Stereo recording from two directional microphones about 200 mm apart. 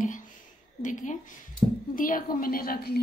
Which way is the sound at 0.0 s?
40° left (ahead or behind).